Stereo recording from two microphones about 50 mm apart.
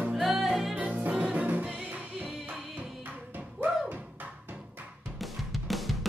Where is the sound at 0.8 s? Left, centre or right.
Right.